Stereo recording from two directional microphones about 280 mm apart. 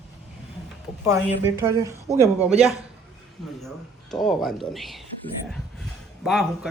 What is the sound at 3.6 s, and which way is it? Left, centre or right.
A man's voice, centre.